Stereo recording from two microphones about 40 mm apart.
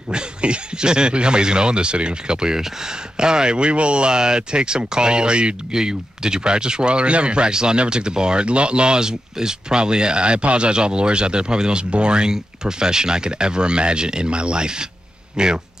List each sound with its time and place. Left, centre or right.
0.1 s speech: right